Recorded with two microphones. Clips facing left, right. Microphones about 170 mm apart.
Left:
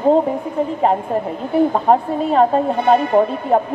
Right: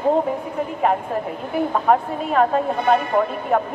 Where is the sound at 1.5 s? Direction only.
30° left (ahead or behind).